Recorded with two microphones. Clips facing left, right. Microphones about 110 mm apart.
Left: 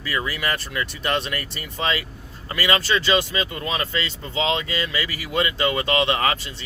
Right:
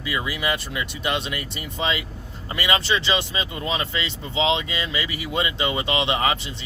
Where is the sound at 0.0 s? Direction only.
15° right (ahead or behind).